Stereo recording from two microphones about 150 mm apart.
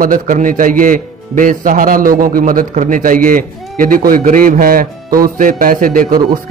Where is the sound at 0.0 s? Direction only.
60° right (ahead or behind).